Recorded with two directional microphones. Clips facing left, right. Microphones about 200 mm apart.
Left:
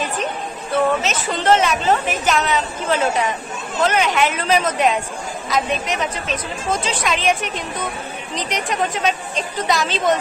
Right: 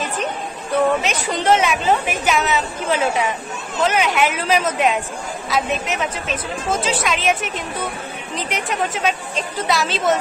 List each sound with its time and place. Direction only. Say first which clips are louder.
1.0 s a woman's voice: even; 15° right (ahead or behind)